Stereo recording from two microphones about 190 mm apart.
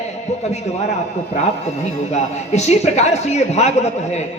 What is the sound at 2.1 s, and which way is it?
A man's voice, 35° left (ahead or behind).